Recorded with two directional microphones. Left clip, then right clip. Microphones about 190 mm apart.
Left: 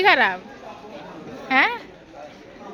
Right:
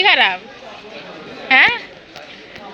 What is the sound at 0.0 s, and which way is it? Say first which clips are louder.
Speech: right 4 dB; 25° left (ahead or behind).